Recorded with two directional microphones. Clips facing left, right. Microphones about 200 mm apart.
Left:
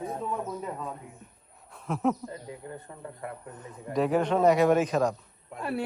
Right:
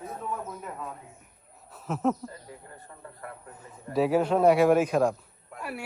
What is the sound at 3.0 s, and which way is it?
Speech, 20° left (ahead or behind).